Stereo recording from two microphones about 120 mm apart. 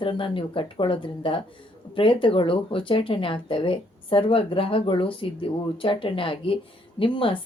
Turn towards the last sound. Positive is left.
turn(degrees=45)  # may be behind; listen again after turning